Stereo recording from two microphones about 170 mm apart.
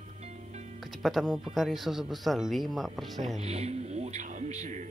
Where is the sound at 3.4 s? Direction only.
40° right (ahead or behind).